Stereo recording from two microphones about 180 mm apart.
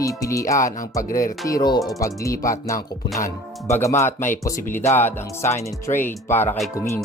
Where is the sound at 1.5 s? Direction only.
20° left (ahead or behind).